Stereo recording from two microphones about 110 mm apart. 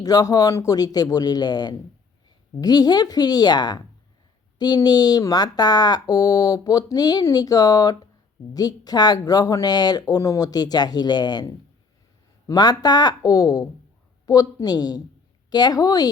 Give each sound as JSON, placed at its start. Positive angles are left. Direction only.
{"t": 0.0, "sound": "speech", "side_deg": 35}